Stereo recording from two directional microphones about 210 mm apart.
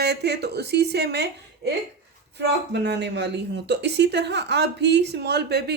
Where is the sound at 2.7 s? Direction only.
55° right (ahead or behind).